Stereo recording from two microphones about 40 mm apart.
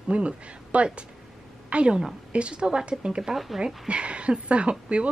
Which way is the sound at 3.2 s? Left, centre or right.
Centre.